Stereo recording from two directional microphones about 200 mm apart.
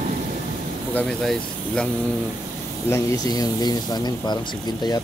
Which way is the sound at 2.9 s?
15° left (ahead or behind).